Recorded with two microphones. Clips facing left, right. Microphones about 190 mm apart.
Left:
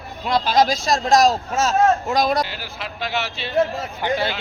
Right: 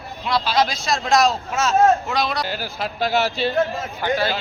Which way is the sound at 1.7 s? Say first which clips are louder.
Right 2 dB; 15° right (ahead or behind).